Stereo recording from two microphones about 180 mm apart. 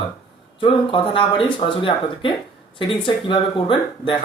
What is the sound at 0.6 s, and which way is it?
Speech, 30° left (ahead or behind).